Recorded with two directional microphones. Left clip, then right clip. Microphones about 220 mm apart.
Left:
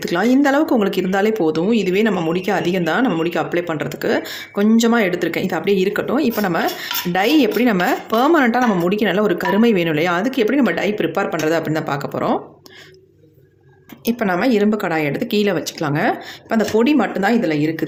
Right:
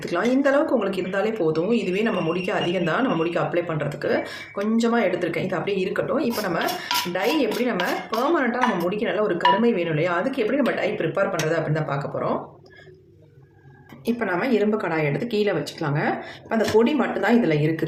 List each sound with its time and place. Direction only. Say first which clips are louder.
0.0 s speech: left 5 dB; 45° left (ahead or behind)
14.0 s speech: left 5 dB; 40° left (ahead or behind)